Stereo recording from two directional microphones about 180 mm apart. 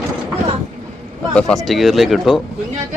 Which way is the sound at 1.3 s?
5° left (ahead or behind).